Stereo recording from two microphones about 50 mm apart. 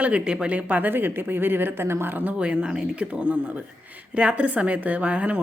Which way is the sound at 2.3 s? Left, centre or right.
Right.